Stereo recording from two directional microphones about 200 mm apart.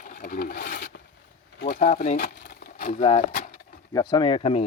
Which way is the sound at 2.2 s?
50° left (ahead or behind).